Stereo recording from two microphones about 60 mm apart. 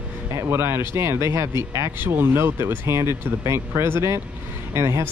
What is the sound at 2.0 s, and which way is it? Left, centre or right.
Speech, right.